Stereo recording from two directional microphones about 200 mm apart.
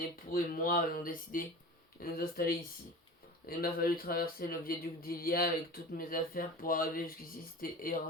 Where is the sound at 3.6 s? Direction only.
50° left (ahead or behind).